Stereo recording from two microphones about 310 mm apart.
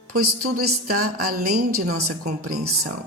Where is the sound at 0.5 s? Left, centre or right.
Right.